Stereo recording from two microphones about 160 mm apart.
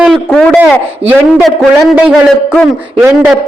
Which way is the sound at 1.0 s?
40° right (ahead or behind).